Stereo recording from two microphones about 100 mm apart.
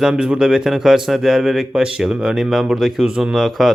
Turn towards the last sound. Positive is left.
turn(degrees=0)  # may be behind; listen again after turning